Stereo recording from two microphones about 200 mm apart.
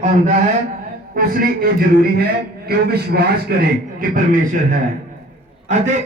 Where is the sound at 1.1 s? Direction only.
45° right (ahead or behind).